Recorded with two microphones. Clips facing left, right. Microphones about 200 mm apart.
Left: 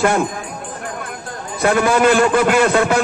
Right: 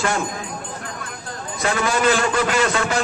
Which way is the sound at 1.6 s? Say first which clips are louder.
Left 6 dB; 55° left (ahead or behind).